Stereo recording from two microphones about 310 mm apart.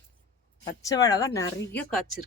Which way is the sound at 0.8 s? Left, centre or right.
Centre.